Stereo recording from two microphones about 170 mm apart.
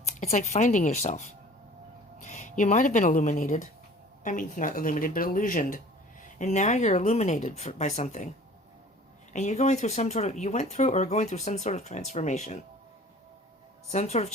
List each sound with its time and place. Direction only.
0.2 s speech: 40° left (ahead or behind)
9.3 s speech: 45° left (ahead or behind)
13.9 s speech: 40° left (ahead or behind)